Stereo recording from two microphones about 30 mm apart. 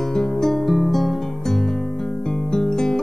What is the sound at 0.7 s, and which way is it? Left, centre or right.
Music, centre.